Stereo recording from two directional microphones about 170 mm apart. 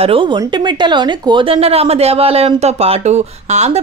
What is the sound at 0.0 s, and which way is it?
A woman's voice, 30° right (ahead or behind).